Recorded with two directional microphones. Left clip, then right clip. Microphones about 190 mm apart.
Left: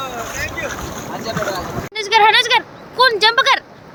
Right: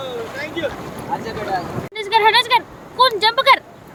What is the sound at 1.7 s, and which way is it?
Speech, centre (ahead or behind).